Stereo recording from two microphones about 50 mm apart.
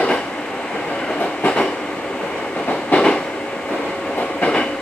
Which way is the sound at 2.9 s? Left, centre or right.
Left.